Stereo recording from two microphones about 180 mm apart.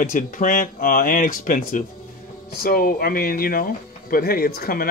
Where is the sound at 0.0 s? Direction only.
50° left (ahead or behind).